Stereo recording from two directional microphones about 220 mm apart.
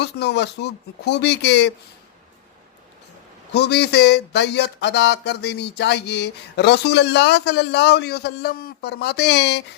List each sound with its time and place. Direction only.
0.0 s speech: 50° left (ahead or behind)
3.5 s speech: 50° left (ahead or behind)